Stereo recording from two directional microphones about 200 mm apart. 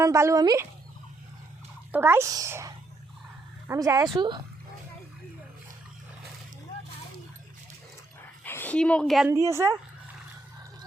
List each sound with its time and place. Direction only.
0.0 s a child's voice: 15° right (ahead or behind)
1.9 s a child's voice: 10° right (ahead or behind)
8.4 s speech: 10° left (ahead or behind)
9.3 s a child's voice: 15° right (ahead or behind)